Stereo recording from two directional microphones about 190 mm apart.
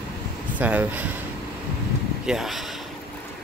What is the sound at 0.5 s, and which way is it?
Speech, 10° right (ahead or behind).